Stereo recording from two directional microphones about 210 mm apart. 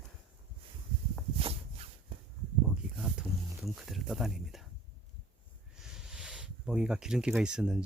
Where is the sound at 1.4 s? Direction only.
25° right (ahead or behind).